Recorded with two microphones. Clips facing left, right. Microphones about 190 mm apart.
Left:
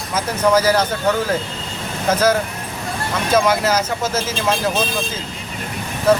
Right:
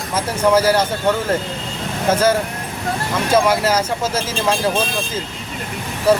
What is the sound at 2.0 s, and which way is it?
Speech, 30° right (ahead or behind).